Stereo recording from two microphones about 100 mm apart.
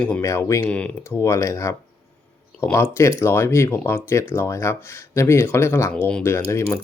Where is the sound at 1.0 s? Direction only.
25° left (ahead or behind).